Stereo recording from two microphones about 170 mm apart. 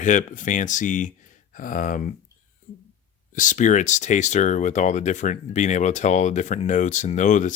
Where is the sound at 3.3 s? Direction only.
50° left (ahead or behind).